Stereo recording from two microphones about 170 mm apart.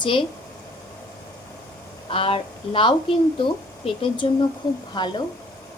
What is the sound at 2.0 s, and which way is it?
A woman's voice, 30° left (ahead or behind).